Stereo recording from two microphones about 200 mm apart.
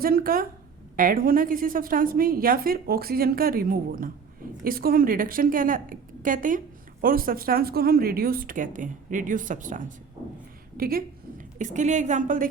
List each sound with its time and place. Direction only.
0.0 s a woman's voice: 45° right (ahead or behind)